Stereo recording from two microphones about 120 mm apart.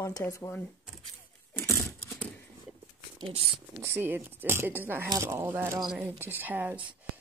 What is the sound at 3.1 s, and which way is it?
Speech, 50° right (ahead or behind).